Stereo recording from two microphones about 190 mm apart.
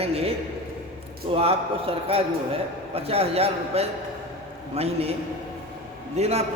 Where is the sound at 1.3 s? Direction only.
30° right (ahead or behind).